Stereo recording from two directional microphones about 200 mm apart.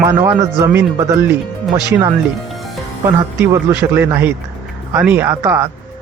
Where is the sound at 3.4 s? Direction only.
10° right (ahead or behind).